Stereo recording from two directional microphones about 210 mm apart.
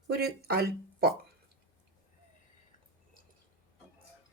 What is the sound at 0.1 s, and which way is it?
Speech, 50° right (ahead or behind).